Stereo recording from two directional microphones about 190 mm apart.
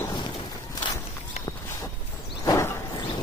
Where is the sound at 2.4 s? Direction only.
15° left (ahead or behind).